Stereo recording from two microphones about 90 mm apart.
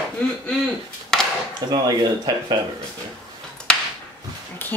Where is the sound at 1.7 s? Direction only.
50° right (ahead or behind).